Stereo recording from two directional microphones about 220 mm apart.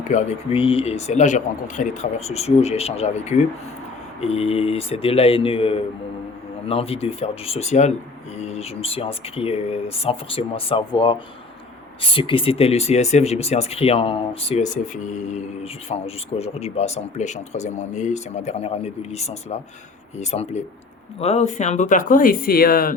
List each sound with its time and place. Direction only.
0.1 s speech: 30° left (ahead or behind)